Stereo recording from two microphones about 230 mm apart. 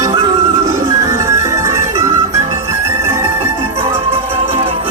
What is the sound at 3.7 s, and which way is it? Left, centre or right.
Music, right.